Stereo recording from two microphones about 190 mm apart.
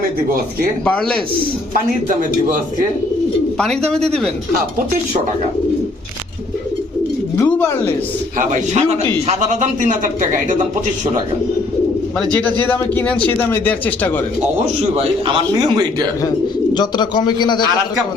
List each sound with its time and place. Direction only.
0.9 s speech: 5° left (ahead or behind)
2.0 s a man's voice: 45° right (ahead or behind)
3.6 s speech: 5° left (ahead or behind)
7.3 s speech: 10° left (ahead or behind)
8.4 s a man's voice: 40° right (ahead or behind)
12.2 s a man's voice: 5° left (ahead or behind)
15.3 s a man's voice: 25° right (ahead or behind)
16.7 s a man's voice: 25° left (ahead or behind)